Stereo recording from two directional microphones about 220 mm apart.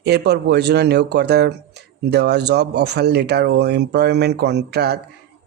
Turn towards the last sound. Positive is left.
turn(degrees=-50)  # may be behind; listen again after turning